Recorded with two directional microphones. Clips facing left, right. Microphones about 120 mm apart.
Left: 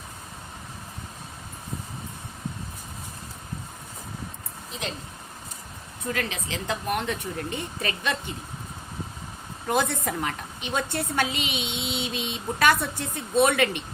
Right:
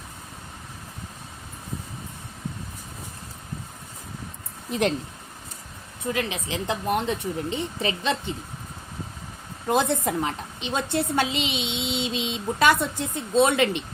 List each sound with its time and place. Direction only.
6.1 s a woman's voice: 20° right (ahead or behind)
9.6 s a woman's voice: 25° right (ahead or behind)